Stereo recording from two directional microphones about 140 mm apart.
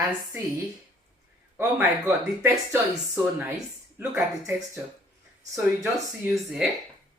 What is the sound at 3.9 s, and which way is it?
Speech, 15° right (ahead or behind).